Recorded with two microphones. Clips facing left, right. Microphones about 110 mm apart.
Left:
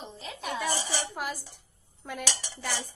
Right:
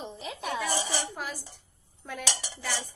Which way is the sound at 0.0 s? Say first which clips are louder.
Right 2 dB; 15° right (ahead or behind).